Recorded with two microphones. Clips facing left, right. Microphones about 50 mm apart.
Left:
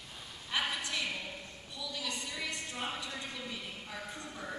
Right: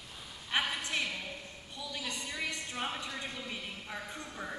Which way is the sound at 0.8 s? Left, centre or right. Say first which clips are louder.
Right 1 dB; right.